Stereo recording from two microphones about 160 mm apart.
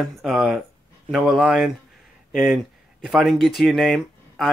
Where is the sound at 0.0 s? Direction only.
5° right (ahead or behind).